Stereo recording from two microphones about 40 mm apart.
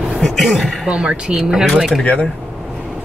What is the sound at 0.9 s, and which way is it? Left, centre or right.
Speech, right.